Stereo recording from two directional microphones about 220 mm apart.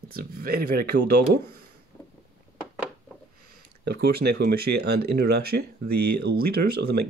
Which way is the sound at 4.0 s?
45° right (ahead or behind).